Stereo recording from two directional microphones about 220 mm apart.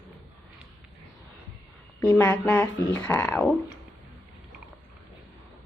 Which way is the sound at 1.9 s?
10° left (ahead or behind).